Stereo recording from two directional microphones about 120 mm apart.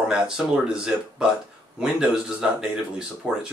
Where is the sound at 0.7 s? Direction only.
5° right (ahead or behind).